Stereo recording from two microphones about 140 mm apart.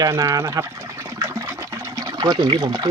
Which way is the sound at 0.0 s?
25° right (ahead or behind).